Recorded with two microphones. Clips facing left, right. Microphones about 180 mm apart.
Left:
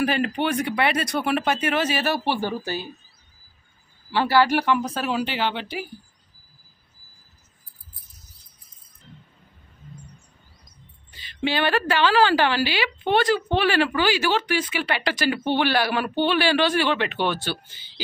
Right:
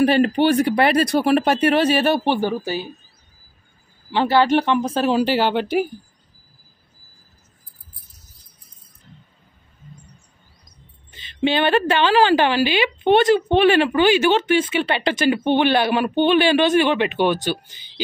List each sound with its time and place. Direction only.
0.0 s speech: 30° right (ahead or behind)
2.4 s speech: 10° right (ahead or behind)
4.1 s speech: 20° right (ahead or behind); by 5.9 s 45° right (ahead or behind)
11.1 s a woman's voice: 25° right (ahead or behind)